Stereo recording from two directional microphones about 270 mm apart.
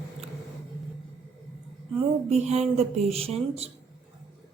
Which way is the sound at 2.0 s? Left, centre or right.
Right.